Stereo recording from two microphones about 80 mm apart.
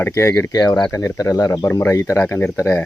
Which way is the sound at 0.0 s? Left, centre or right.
Left.